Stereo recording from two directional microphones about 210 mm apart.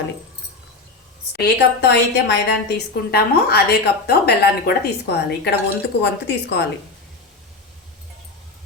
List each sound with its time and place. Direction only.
1.3 s a woman's voice: 55° left (ahead or behind)